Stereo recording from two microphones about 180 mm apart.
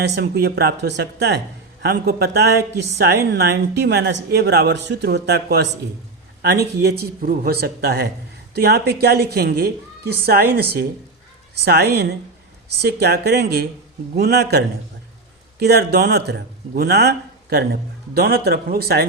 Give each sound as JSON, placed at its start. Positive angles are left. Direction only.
{"t": 0.2, "sound": "speech", "side_deg": -60}
{"t": 1.8, "sound": "speech", "side_deg": -60}